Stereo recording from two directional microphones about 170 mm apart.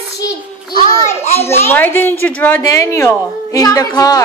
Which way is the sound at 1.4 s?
15° left (ahead or behind).